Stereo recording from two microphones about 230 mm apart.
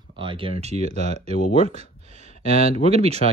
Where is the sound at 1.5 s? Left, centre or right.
Right.